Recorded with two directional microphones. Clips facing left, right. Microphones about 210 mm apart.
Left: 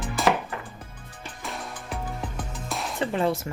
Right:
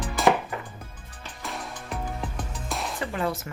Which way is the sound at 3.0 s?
25° left (ahead or behind).